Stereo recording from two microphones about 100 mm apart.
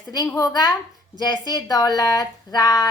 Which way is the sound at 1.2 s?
45° left (ahead or behind).